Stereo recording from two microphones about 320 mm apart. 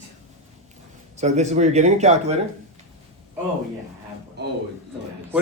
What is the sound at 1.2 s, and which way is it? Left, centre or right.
Speech, right.